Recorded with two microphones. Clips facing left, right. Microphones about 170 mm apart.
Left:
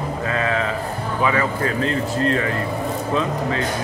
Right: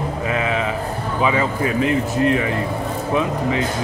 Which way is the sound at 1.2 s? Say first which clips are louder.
Right 1 dB; 20° right (ahead or behind).